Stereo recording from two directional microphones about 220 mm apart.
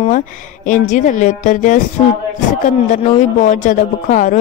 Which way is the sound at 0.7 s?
35° left (ahead or behind).